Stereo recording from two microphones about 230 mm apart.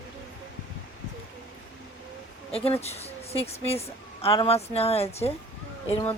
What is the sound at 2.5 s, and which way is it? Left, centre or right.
A woman's voice, left.